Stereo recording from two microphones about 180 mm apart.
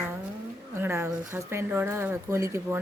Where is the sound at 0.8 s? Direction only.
15° right (ahead or behind).